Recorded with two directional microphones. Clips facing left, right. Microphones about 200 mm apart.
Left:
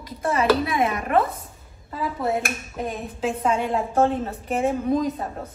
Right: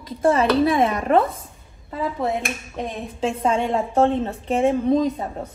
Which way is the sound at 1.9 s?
Centre (ahead or behind).